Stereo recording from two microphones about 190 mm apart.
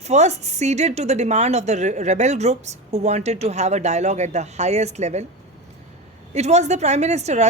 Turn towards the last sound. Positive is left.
turn(degrees=-35)  # may be behind; listen again after turning